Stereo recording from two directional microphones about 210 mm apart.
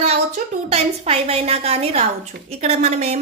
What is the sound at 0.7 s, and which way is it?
A woman's voice, 30° right (ahead or behind).